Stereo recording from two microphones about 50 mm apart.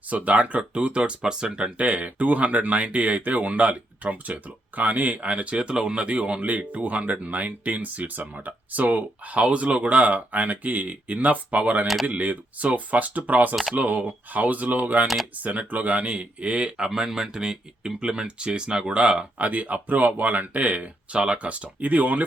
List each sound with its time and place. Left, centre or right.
0.1 s speech: right
15.0 s speech: centre
15.4 s speech: right
19.4 s speech: right